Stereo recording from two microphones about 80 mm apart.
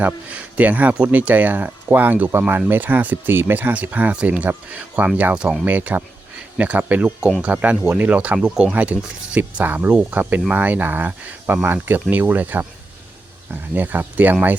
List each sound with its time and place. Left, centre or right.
0.0 s speech: centre
5.6 s speech: right